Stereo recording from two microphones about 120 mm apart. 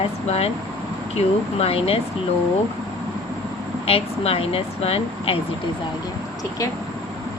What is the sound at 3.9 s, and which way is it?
Speech, 55° left (ahead or behind).